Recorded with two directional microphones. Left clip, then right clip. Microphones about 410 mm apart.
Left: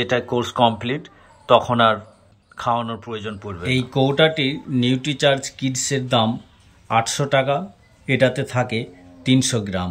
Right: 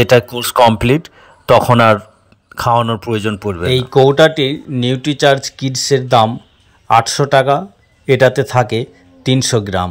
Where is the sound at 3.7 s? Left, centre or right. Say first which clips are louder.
Right 9 dB; centre.